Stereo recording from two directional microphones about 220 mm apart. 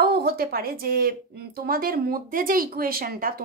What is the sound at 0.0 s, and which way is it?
Speech, 45° right (ahead or behind).